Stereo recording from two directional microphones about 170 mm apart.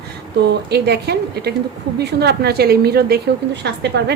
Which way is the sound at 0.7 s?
70° right (ahead or behind).